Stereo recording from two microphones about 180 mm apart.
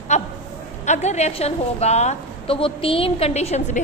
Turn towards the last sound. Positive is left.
turn(degrees=35)  # may be behind; listen again after turning